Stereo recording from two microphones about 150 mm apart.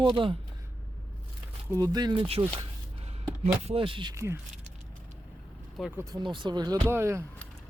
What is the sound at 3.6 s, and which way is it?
Speech, 40° right (ahead or behind).